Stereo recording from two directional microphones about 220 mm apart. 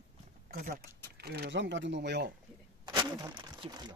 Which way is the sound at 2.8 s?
20° right (ahead or behind).